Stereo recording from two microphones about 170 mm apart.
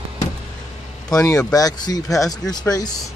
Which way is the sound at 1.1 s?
20° left (ahead or behind).